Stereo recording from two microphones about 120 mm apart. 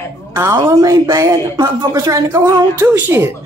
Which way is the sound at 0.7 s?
30° right (ahead or behind).